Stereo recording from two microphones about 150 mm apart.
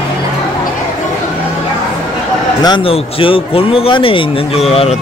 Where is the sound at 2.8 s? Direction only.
35° left (ahead or behind).